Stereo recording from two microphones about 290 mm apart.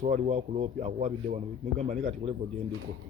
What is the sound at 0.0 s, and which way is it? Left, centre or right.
Speech, right.